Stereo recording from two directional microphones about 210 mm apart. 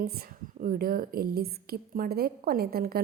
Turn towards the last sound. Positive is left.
turn(degrees=-45)  # may be behind; listen again after turning